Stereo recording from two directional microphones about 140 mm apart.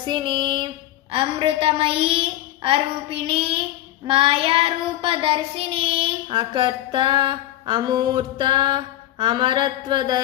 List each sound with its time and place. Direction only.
0.0 s child singing: 30° right (ahead or behind)